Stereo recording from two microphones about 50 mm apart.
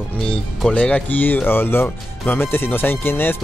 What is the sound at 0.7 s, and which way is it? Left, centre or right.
Speech, centre.